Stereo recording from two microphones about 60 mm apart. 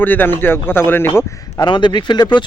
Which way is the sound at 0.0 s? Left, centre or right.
Left.